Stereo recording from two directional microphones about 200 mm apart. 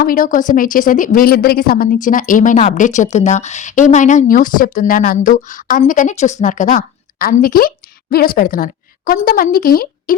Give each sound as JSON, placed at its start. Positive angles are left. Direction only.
{"t": 0.0, "sound": "a woman's voice", "side_deg": 45}